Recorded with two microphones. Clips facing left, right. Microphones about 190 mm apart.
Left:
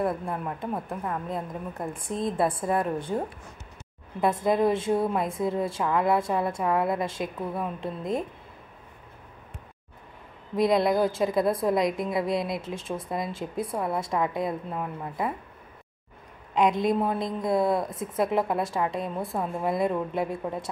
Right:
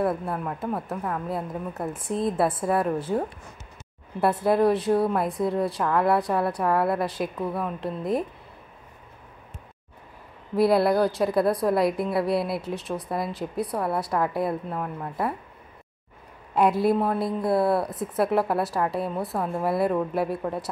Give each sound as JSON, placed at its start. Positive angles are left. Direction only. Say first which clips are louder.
{"t": 0.0, "sound": "a woman's voice", "louder": "right 2 dB", "side_deg": -5}
{"t": 4.5, "sound": "a woman's voice", "louder": "right 3 dB", "side_deg": 0}
{"t": 10.5, "sound": "a woman's voice", "louder": "right 2 dB", "side_deg": -5}
{"t": 16.5, "sound": "a woman's voice", "louder": "right 2 dB", "side_deg": -5}